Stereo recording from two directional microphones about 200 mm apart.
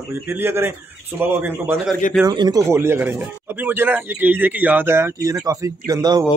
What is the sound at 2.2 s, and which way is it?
Speech, 20° right (ahead or behind).